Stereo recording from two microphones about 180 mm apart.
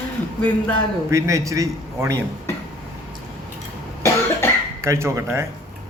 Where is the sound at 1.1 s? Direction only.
15° right (ahead or behind).